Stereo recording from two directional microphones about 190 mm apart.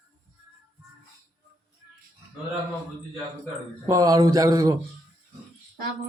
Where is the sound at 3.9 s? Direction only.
20° right (ahead or behind).